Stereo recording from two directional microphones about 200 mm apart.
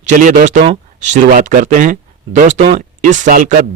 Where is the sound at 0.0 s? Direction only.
40° right (ahead or behind).